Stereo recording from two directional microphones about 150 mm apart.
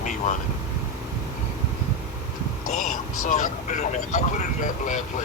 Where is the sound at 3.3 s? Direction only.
60° left (ahead or behind).